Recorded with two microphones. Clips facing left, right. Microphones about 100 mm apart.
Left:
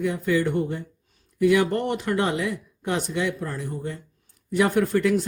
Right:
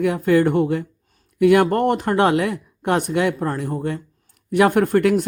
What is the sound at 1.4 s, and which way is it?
Speech, 55° right (ahead or behind).